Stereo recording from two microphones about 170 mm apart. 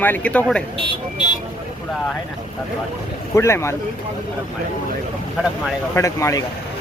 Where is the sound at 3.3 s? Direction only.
15° left (ahead or behind).